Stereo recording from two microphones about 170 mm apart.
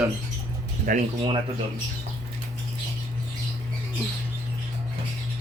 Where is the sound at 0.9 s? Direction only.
55° right (ahead or behind).